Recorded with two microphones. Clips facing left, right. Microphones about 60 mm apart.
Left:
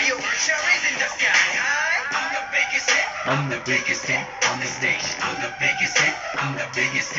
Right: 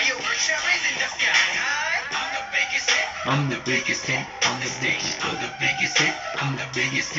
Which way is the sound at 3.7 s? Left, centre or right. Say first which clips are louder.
Left 4 dB; left.